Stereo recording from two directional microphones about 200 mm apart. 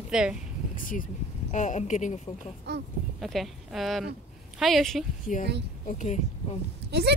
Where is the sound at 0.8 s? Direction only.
40° left (ahead or behind).